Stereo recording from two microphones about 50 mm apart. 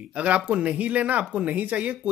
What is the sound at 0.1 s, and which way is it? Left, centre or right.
Speech, right.